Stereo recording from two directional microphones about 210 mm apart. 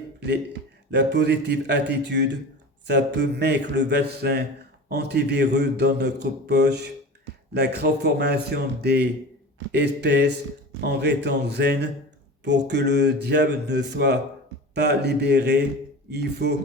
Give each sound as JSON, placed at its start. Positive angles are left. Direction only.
{"t": 0.9, "sound": "a man's voice", "side_deg": -55}